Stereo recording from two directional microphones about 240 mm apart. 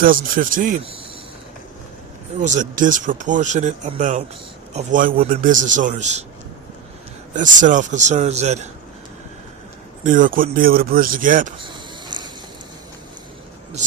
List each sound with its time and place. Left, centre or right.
0.0 s speech: right
2.4 s speech: right
7.3 s speech: right
10.0 s speech: right
11.6 s a sound: centre